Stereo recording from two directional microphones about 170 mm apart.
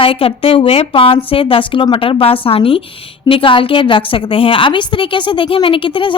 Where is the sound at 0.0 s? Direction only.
30° left (ahead or behind).